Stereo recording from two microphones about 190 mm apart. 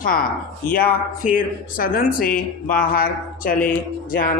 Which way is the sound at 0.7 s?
45° left (ahead or behind).